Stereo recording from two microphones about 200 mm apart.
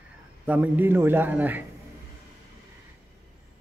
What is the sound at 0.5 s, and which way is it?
A man's voice, 10° right (ahead or behind).